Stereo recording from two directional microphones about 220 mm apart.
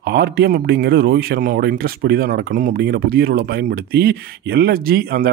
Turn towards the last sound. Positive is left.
turn(degrees=-45)  # may be behind; listen again after turning